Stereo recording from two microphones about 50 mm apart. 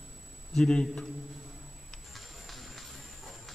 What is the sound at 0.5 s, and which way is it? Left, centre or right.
Speech, centre.